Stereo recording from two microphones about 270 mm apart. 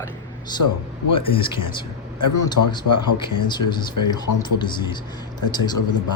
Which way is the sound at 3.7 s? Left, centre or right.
Centre.